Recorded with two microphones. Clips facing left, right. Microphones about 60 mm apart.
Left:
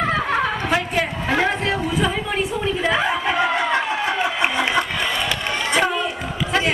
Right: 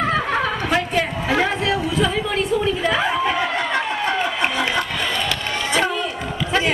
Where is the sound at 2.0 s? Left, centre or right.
Centre.